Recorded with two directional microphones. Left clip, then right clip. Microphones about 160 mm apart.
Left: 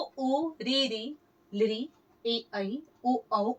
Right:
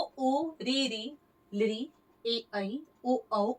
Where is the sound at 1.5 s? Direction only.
15° left (ahead or behind).